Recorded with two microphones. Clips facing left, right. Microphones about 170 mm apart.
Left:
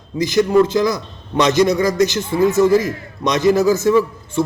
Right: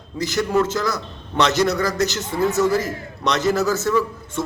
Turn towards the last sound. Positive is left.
turn(degrees=15)  # may be behind; listen again after turning